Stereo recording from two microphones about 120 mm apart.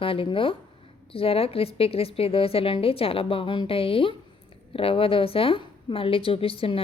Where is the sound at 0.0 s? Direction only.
50° left (ahead or behind).